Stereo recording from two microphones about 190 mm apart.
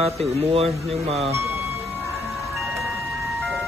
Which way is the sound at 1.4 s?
15° right (ahead or behind).